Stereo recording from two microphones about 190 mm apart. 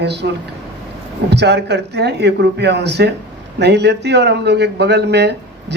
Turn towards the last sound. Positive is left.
turn(degrees=-60)  # may be behind; listen again after turning